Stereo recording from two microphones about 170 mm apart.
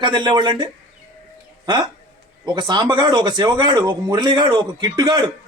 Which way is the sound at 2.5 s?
25° right (ahead or behind).